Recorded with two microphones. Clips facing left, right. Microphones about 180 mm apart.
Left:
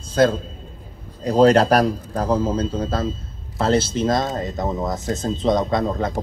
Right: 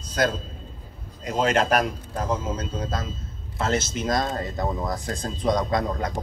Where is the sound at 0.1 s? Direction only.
30° left (ahead or behind).